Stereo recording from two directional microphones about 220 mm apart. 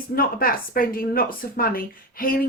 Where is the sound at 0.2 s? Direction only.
40° left (ahead or behind).